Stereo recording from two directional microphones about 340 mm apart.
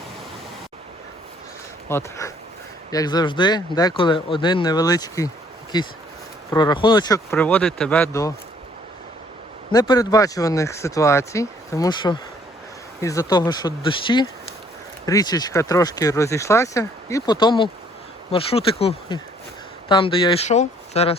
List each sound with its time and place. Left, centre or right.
1.9 s speech: centre
6.5 s speech: centre
9.7 s speech: centre